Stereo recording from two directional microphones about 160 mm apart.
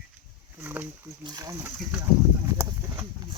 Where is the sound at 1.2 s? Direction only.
20° right (ahead or behind).